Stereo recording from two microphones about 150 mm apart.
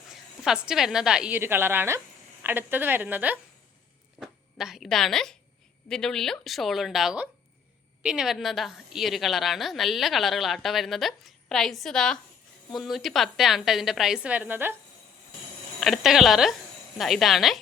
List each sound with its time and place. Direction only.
0.1 s a woman's voice: 5° right (ahead or behind)
15.8 s a woman's voice: centre (ahead or behind)